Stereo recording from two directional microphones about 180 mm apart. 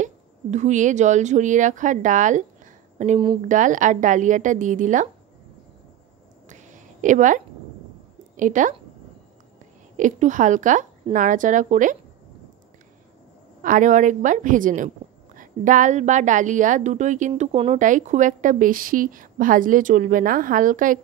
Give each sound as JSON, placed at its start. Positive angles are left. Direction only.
{"t": 0.0, "sound": "a woman's voice", "side_deg": -40}
{"t": 6.5, "sound": "a sound", "side_deg": -45}
{"t": 8.4, "sound": "a woman's voice", "side_deg": -45}
{"t": 9.9, "sound": "a woman's voice", "side_deg": -45}
{"t": 13.6, "sound": "a woman's voice", "side_deg": -45}